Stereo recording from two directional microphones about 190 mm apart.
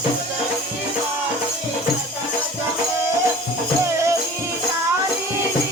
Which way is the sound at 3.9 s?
15° right (ahead or behind).